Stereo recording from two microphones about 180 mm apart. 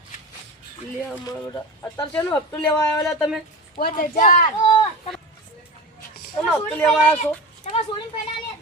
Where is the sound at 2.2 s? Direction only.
20° left (ahead or behind).